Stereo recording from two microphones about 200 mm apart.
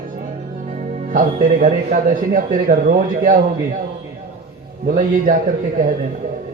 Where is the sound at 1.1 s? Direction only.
40° right (ahead or behind).